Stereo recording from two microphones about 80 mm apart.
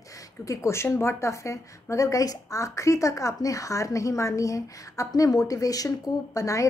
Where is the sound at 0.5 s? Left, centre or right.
Left.